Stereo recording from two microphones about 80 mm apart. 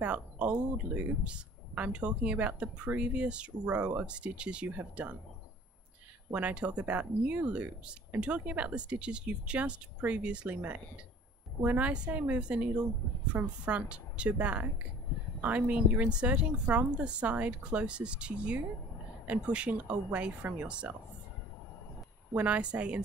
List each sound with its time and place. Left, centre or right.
0.0 s speech: centre
6.3 s speech: centre
22.3 s speech: centre